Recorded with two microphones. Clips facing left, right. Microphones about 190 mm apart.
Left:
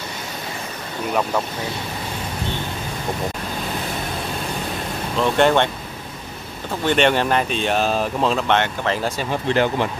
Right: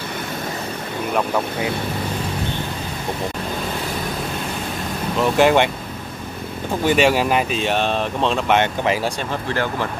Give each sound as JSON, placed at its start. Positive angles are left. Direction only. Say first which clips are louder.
{"t": 5.2, "sound": "speech", "louder": "right 1 dB", "side_deg": -5}
{"t": 6.9, "sound": "speech", "louder": "right 1 dB", "side_deg": -5}
{"t": 8.5, "sound": "speech", "louder": "right 3 dB", "side_deg": -10}
{"t": 9.5, "sound": "speech", "louder": "left 5 dB", "side_deg": 20}